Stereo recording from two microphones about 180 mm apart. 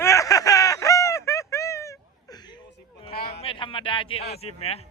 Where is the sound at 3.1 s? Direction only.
60° left (ahead or behind).